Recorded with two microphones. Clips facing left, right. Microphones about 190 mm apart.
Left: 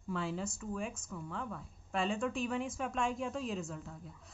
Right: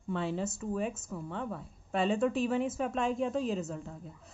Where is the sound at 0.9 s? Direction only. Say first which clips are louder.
Right 5 dB; 20° right (ahead or behind).